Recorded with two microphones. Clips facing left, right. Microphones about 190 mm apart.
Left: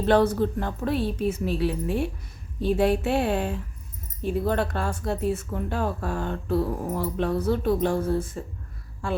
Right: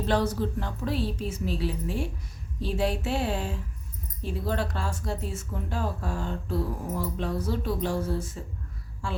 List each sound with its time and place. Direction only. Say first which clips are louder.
0.0 s speech: left 6 dB; 60° left (ahead or behind)